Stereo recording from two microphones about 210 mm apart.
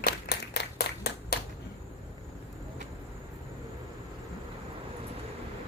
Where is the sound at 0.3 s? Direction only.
50° left (ahead or behind).